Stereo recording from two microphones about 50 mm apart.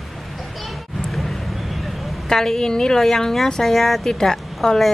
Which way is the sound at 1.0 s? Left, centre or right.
Centre.